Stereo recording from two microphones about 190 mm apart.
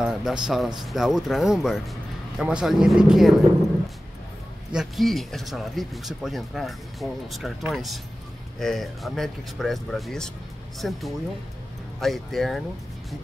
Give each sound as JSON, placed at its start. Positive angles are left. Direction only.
{"t": 0.0, "sound": "speech", "side_deg": -5}
{"t": 4.7, "sound": "speech", "side_deg": 0}